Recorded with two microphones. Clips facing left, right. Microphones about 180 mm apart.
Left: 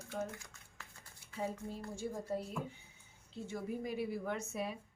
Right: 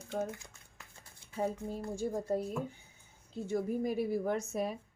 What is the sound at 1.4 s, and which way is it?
Speech, 45° right (ahead or behind).